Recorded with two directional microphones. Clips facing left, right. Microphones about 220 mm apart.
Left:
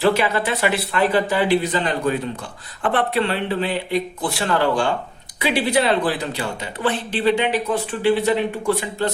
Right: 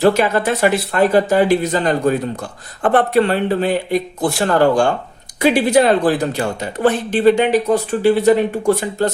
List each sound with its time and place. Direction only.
0.0 s speech: 45° right (ahead or behind)